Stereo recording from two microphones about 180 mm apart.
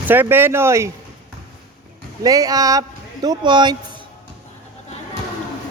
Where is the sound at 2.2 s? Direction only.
20° right (ahead or behind).